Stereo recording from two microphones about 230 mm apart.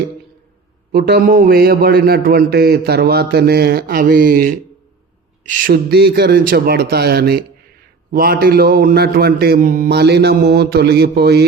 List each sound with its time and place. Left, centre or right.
0.9 s a man's voice: right